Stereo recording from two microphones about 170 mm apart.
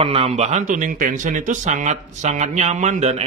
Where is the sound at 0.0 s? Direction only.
35° right (ahead or behind).